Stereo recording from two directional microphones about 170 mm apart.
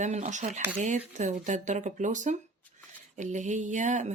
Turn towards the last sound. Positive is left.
turn(degrees=-45)  # may be behind; listen again after turning